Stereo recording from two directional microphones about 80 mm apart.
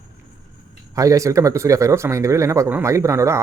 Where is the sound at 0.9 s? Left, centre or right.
Right.